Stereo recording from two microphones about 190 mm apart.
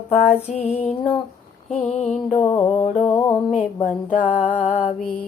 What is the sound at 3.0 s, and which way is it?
Music, 15° left (ahead or behind).